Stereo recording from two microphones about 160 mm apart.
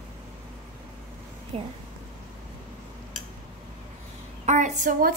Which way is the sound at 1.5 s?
40° right (ahead or behind).